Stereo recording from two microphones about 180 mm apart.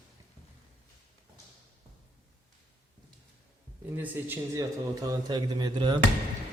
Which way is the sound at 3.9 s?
10° right (ahead or behind).